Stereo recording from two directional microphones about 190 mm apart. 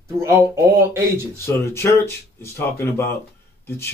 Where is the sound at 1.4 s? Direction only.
15° left (ahead or behind).